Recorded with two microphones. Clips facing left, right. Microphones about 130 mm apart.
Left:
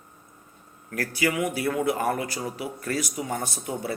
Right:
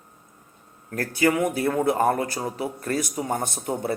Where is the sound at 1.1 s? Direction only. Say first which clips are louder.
Right 5 dB; 50° right (ahead or behind).